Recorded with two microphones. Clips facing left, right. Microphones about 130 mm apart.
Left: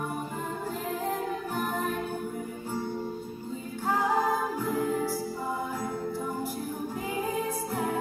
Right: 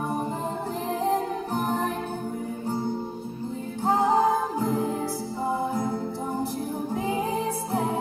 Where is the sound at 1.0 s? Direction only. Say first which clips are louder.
Right 8 dB; 35° right (ahead or behind).